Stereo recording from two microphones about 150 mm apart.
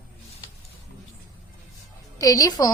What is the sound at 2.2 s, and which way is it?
Speech, 25° left (ahead or behind).